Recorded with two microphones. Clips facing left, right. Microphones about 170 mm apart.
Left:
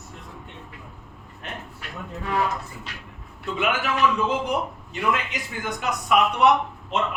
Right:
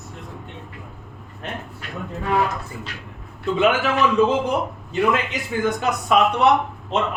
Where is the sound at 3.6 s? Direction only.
25° right (ahead or behind).